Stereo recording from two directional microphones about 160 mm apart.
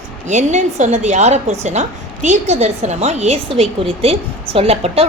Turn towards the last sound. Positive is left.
turn(degrees=-40)  # may be behind; listen again after turning